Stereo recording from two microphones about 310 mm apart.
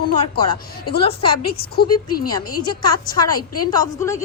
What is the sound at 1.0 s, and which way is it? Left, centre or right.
Speech, centre.